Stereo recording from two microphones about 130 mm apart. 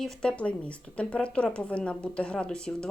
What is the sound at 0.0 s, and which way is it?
Speech, 5° left (ahead or behind).